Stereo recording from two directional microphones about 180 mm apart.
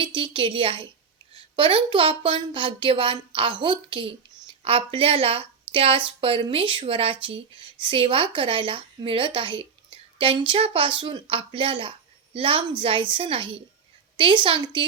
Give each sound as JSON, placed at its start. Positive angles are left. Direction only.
{"t": 0.0, "sound": "a woman's voice", "side_deg": -25}